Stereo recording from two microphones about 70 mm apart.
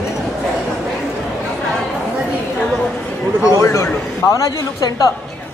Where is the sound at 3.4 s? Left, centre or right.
Left.